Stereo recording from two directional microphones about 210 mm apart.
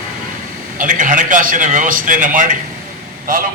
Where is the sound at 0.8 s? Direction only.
40° right (ahead or behind).